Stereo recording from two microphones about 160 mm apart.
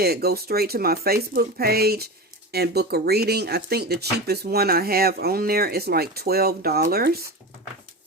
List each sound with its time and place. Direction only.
0.0 s speech: 75° right (ahead or behind)